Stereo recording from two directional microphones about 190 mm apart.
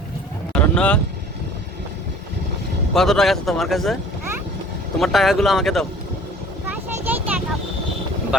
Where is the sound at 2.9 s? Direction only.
Centre (ahead or behind).